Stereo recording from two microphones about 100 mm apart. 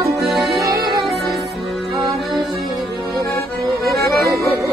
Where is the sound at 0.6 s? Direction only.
40° right (ahead or behind).